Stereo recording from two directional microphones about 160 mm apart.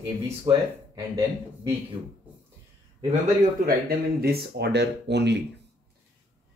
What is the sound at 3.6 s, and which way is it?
Speech, 70° right (ahead or behind).